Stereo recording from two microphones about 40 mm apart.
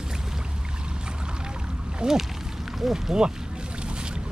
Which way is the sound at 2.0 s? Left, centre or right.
Right.